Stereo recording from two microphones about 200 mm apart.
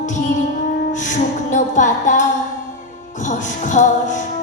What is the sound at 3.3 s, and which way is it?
Music, 40° left (ahead or behind).